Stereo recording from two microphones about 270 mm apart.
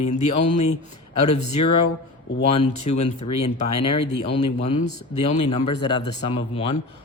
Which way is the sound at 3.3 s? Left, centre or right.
Left.